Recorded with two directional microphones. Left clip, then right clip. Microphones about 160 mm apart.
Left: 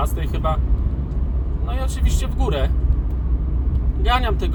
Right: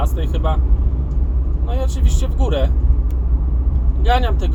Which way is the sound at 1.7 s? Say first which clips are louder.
Right 4 dB; 10° left (ahead or behind).